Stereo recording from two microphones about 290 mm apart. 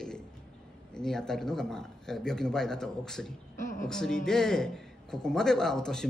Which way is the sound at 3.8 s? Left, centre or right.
Centre.